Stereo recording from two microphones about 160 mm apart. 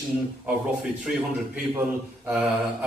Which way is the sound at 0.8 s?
5° right (ahead or behind).